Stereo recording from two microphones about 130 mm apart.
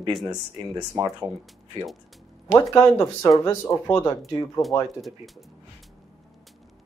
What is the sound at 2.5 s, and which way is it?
Speech, 25° left (ahead or behind).